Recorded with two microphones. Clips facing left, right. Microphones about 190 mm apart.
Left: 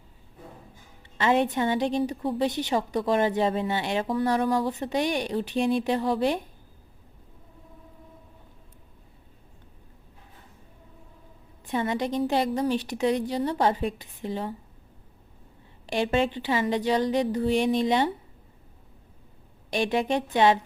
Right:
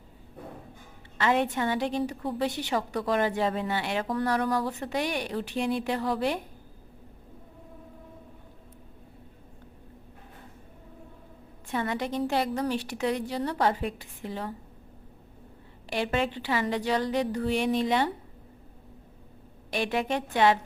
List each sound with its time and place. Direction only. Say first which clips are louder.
1.2 s a woman's voice: left 3 dB; 20° left (ahead or behind)
11.6 s a woman's voice: left 3 dB; 20° left (ahead or behind)
15.9 s a woman's voice: left 3 dB; 25° left (ahead or behind)
19.7 s a woman's voice: left 3 dB; 20° left (ahead or behind)